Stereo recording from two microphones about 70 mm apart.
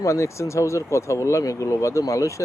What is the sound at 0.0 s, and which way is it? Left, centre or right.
Speech, left.